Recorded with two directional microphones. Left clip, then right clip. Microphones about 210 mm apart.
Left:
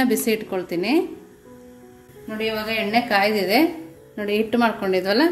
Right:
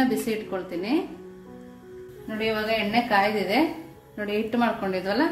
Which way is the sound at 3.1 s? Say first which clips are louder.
Left 3 dB; 35° left (ahead or behind).